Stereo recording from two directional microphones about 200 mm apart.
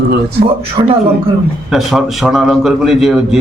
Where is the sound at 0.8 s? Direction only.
30° right (ahead or behind).